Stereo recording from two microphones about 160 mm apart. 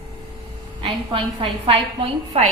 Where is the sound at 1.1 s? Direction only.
35° right (ahead or behind).